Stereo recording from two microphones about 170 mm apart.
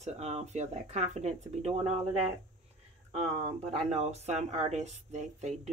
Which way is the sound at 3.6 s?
40° right (ahead or behind).